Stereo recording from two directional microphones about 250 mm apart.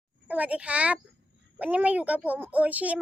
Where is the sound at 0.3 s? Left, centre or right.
Centre.